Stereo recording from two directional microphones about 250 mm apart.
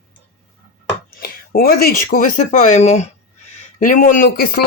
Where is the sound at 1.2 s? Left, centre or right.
Left.